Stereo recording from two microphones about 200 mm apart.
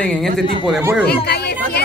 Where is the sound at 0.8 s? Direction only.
10° right (ahead or behind).